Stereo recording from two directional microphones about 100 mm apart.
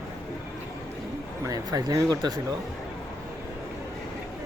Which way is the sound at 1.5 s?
35° right (ahead or behind).